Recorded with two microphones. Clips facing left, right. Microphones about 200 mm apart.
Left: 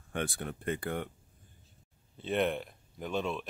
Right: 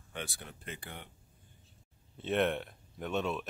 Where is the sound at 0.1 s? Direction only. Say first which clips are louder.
Left 8 dB; 55° left (ahead or behind).